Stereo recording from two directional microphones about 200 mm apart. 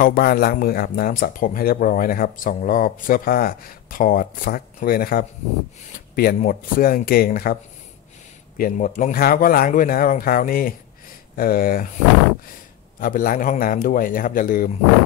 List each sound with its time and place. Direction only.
0.0 s speech: 45° left (ahead or behind)
8.5 s speech: 45° left (ahead or behind)
13.0 s speech: 45° left (ahead or behind)